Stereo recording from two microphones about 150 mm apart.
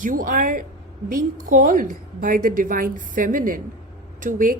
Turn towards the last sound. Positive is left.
turn(degrees=-65)  # may be behind; listen again after turning